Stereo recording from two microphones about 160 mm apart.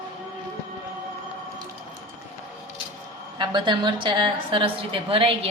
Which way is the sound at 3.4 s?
30° right (ahead or behind).